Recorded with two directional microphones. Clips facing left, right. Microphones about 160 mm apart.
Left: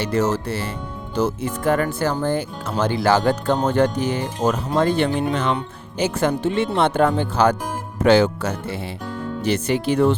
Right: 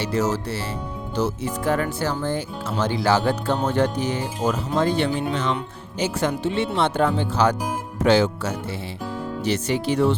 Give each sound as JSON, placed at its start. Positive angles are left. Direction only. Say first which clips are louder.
{"t": 0.0, "sound": "speech", "louder": "left 2 dB", "side_deg": 55}